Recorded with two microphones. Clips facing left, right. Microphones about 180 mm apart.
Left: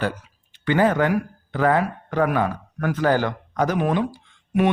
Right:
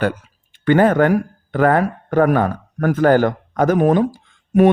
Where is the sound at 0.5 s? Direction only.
50° right (ahead or behind).